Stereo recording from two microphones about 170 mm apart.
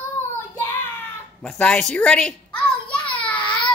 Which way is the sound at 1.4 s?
5° left (ahead or behind).